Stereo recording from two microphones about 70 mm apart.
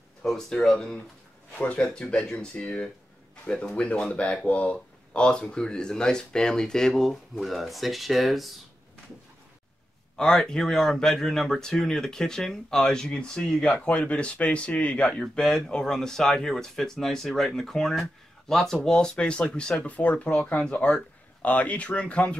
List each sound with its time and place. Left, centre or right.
0.2 s speech: centre
10.1 s speech: centre
20.0 s speech: left